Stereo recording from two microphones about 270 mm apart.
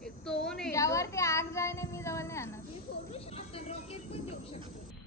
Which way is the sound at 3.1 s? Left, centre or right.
Left.